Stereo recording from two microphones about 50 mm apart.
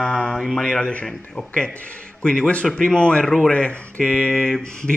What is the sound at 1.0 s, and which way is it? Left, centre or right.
Speech, centre.